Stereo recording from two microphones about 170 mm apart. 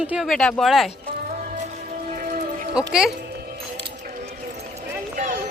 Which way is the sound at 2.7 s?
5° right (ahead or behind).